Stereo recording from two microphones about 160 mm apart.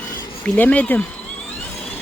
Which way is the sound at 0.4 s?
10° left (ahead or behind).